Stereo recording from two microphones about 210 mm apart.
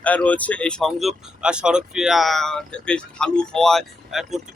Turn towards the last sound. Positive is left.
turn(degrees=0)  # may be behind; listen again after turning